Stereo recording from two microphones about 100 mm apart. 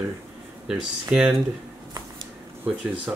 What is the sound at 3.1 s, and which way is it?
Speech, 20° right (ahead or behind).